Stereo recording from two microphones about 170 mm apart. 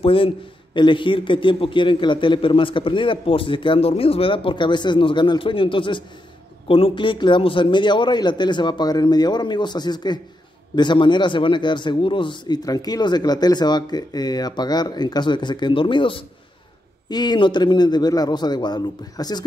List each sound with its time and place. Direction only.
0.0 s a man's voice: 30° left (ahead or behind)